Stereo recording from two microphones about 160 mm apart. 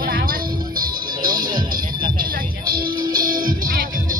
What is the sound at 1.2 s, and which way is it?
Music, 25° right (ahead or behind).